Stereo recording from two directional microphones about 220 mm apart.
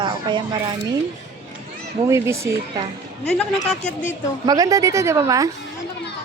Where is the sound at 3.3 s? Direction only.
Centre (ahead or behind).